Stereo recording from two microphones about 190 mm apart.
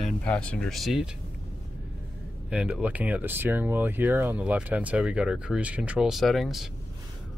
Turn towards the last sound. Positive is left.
turn(degrees=0)  # may be behind; listen again after turning